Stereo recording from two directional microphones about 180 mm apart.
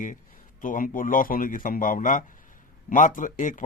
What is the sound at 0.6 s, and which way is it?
Speech, 50° left (ahead or behind).